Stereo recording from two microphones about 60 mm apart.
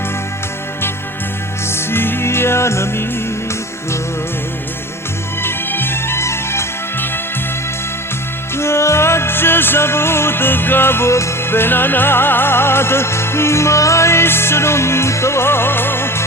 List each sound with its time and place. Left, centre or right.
1.7 s music: left
5.4 s music: left
8.5 s music: left